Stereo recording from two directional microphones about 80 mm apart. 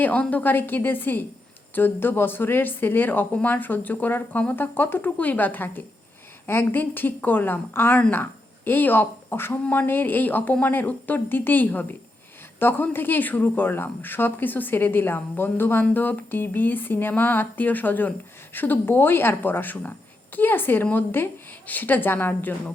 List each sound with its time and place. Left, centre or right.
0.0 s speech: centre